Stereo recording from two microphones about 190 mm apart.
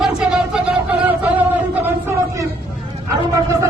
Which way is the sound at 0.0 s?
5° right (ahead or behind).